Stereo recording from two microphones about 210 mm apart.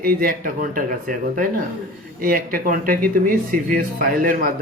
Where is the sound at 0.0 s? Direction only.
45° right (ahead or behind).